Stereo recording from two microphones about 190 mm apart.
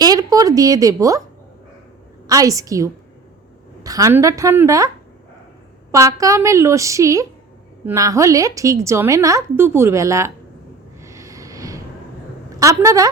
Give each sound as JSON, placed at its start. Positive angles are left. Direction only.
{"t": 0.0, "sound": "a woman's voice", "side_deg": -20}
{"t": 2.2, "sound": "a woman's voice", "side_deg": -20}
{"t": 5.9, "sound": "a woman's voice", "side_deg": -15}
{"t": 11.0, "sound": "a sound", "side_deg": -15}
{"t": 12.5, "sound": "a woman's voice", "side_deg": -15}